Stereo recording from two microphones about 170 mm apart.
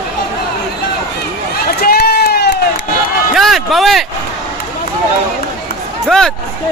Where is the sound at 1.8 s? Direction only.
65° left (ahead or behind).